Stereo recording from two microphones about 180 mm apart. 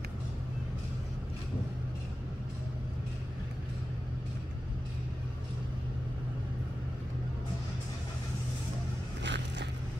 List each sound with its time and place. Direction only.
9.2 s biting: 75° right (ahead or behind)